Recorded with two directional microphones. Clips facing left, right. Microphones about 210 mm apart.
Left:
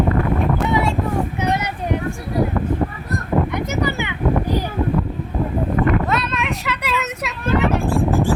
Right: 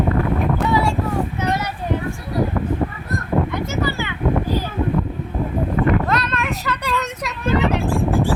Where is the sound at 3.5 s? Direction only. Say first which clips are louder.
Left 1 dB; 20° left (ahead or behind).